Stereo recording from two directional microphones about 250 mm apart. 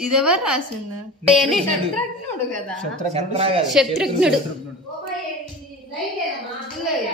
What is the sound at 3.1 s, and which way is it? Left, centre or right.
Speech, right.